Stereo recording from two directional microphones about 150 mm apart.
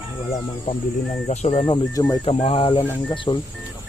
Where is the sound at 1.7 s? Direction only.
25° left (ahead or behind).